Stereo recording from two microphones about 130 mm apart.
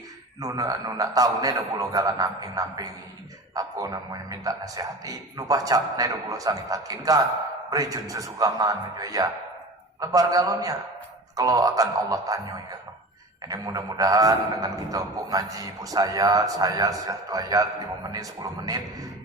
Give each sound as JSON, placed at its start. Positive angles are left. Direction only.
{"t": 0.3, "sound": "a man's voice", "side_deg": -25}
{"t": 13.5, "sound": "a man's voice", "side_deg": -30}